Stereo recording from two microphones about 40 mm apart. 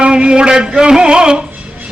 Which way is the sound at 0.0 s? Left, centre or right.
Right.